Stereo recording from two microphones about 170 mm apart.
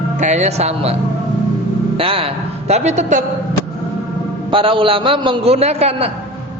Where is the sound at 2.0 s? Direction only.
35° right (ahead or behind).